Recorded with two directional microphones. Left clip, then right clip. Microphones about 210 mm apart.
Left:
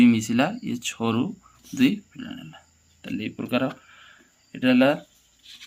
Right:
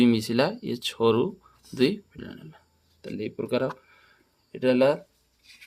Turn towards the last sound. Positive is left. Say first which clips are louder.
# left 1 dB
turn(degrees=-45)  # may be behind; listen again after turning